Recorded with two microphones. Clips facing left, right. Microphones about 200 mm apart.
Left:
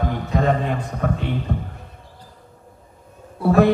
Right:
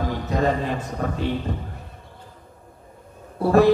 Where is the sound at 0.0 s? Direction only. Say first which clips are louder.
Left 1 dB; 55° left (ahead or behind).